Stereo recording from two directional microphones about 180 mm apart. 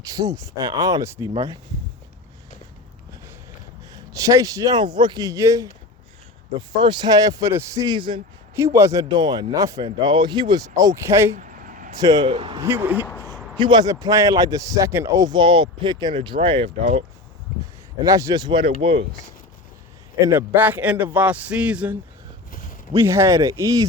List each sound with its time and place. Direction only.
0.0 s speech: 20° right (ahead or behind)
4.1 s speech: 20° right (ahead or behind)
8.5 s speech: 15° right (ahead or behind)
11.3 s a sound: 45° right (ahead or behind)
11.9 s speech: 20° right (ahead or behind)
12.6 s a man's voice: 10° right (ahead or behind)
13.6 s speech: 25° right (ahead or behind)
18.0 s speech: 20° right (ahead or behind)
18.6 s speech: 35° right (ahead or behind)
20.2 s a man's voice: 15° right (ahead or behind)
23.0 s a man's voice: 15° right (ahead or behind)